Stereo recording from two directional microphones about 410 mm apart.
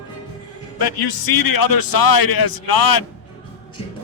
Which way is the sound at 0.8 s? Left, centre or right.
Left.